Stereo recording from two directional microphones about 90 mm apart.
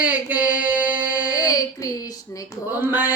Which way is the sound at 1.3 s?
40° left (ahead or behind).